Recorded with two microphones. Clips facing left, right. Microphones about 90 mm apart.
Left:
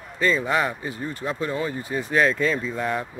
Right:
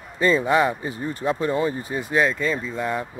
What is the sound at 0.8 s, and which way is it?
Speech, 25° right (ahead or behind).